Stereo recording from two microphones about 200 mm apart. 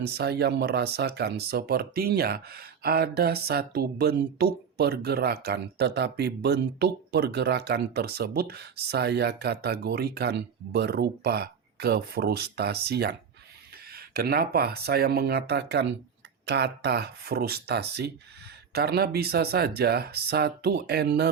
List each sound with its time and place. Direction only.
0.0 s speech: 55° right (ahead or behind)